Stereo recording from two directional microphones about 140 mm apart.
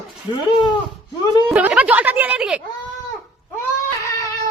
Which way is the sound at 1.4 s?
10° right (ahead or behind).